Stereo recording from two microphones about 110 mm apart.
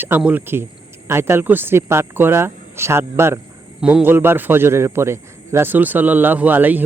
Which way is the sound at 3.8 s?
10° right (ahead or behind).